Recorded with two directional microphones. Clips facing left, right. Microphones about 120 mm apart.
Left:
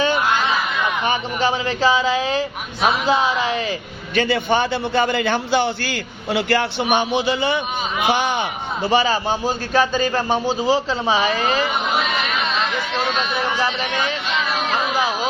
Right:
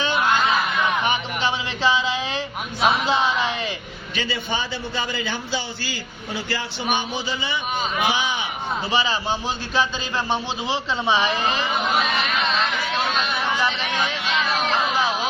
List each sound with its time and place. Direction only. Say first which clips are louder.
1.0 s speech: left 3 dB; 40° left (ahead or behind)
4.1 s a man's voice: left 9 dB; 55° left (ahead or behind); by 11.6 s 40° left (ahead or behind)
12.4 s chatter: left 1 dB; centre (ahead or behind)
13.7 s a sound: left 2 dB; centre (ahead or behind)